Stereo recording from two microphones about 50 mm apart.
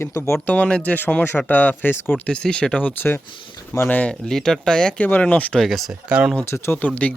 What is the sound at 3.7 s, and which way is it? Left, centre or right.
Speech, left.